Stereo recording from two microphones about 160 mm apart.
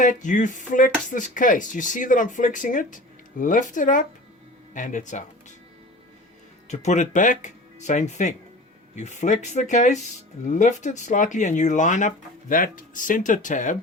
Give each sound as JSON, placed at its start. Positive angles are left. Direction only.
{"t": 0.0, "sound": "speech", "side_deg": 50}
{"t": 6.7, "sound": "speech", "side_deg": 50}